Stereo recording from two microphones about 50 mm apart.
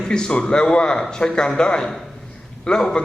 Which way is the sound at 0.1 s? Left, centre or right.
Centre.